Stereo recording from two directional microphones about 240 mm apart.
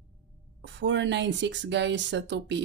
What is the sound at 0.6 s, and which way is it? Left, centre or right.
A woman's voice, right.